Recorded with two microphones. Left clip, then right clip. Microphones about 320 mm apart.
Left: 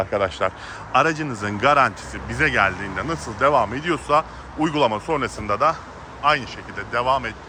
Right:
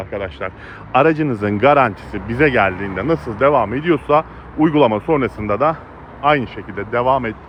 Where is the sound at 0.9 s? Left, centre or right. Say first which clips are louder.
Right 5 dB; centre.